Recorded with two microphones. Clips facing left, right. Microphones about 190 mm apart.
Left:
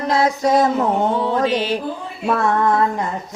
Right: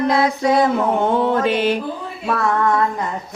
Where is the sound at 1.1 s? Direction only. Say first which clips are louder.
Right 1 dB; 55° right (ahead or behind).